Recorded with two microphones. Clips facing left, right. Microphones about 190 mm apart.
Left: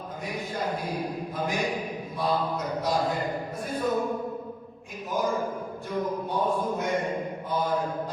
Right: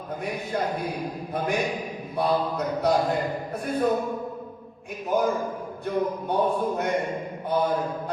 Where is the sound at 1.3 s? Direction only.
60° right (ahead or behind).